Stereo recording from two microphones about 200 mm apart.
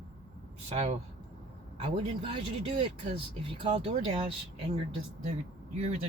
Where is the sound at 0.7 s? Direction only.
35° right (ahead or behind).